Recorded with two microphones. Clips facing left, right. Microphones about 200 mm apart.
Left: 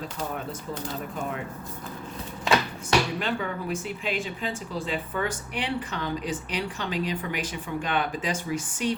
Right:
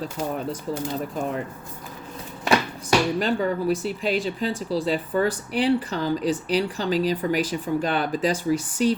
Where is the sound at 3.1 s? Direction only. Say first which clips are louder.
Right 6 dB; 40° right (ahead or behind).